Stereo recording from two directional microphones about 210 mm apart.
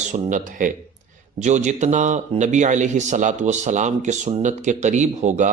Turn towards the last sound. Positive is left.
turn(degrees=-35)  # may be behind; listen again after turning